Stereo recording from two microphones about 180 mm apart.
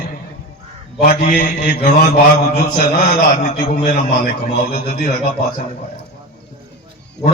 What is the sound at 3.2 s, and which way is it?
A man's voice, 45° left (ahead or behind).